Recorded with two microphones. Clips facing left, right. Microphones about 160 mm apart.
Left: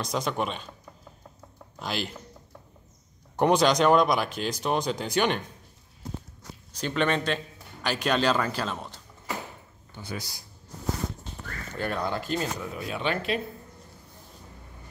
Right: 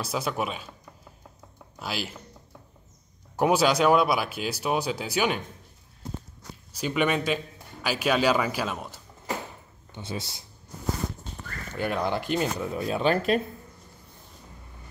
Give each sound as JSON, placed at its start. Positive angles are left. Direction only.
{"t": 0.0, "sound": "speech", "side_deg": -5}
{"t": 1.8, "sound": "speech", "side_deg": -5}
{"t": 3.3, "sound": "speech", "side_deg": -5}
{"t": 6.7, "sound": "speech", "side_deg": -10}
{"t": 9.9, "sound": "speech", "side_deg": -25}
{"t": 11.7, "sound": "speech", "side_deg": -10}
{"t": 12.7, "sound": "speech", "side_deg": -35}